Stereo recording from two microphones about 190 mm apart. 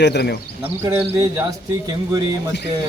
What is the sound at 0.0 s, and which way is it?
Speech, 60° left (ahead or behind).